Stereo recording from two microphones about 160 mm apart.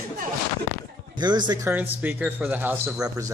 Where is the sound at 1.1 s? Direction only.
25° right (ahead or behind).